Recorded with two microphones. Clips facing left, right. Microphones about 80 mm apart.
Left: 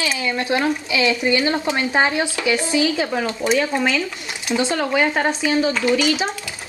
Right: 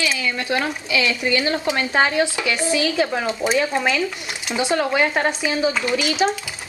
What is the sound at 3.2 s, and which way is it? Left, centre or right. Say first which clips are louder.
Speech: left 1 dB; right.